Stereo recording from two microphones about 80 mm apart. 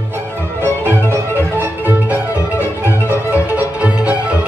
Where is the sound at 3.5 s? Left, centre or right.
Centre.